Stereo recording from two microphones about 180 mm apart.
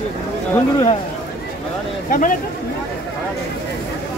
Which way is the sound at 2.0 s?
50° left (ahead or behind).